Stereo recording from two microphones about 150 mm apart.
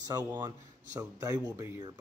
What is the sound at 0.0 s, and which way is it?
Speech, 25° right (ahead or behind).